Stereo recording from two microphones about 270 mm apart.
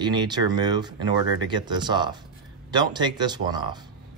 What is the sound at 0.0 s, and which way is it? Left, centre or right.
Speech, centre.